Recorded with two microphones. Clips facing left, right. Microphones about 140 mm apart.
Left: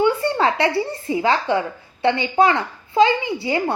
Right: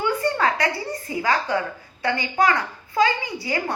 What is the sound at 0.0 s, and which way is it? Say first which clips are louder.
A woman's voice: left 4 dB; 25° left (ahead or behind).